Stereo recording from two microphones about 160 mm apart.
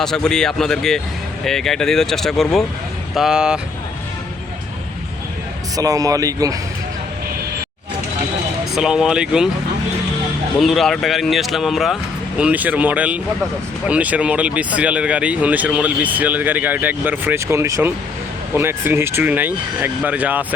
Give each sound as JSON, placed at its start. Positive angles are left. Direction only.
{"t": 0.0, "sound": "speech", "side_deg": 5}
{"t": 5.7, "sound": "a man's voice", "side_deg": -20}
{"t": 8.7, "sound": "speech", "side_deg": -5}
{"t": 10.6, "sound": "speech", "side_deg": 0}